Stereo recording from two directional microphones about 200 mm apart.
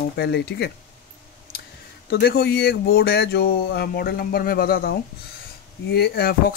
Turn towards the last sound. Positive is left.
turn(degrees=50)  # may be behind; listen again after turning